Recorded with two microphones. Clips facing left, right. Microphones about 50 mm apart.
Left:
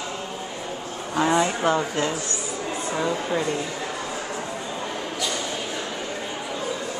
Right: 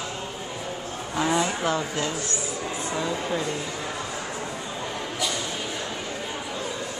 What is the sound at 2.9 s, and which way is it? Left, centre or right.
Speech, centre.